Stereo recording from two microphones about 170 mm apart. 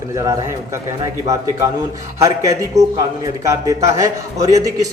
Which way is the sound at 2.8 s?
40° right (ahead or behind).